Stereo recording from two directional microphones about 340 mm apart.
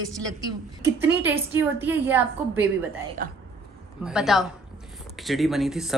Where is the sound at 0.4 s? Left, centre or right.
Centre.